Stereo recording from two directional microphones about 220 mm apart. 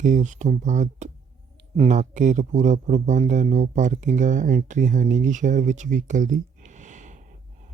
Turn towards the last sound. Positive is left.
turn(degrees=-35)  # may be behind; listen again after turning